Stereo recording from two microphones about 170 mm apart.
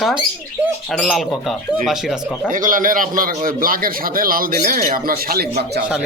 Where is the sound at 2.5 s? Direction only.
50° right (ahead or behind).